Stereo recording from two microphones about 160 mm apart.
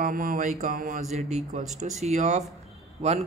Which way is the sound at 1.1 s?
45° right (ahead or behind).